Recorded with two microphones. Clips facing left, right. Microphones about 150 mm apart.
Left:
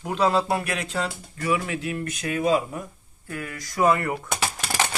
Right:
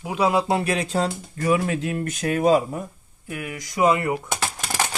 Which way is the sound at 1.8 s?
25° right (ahead or behind).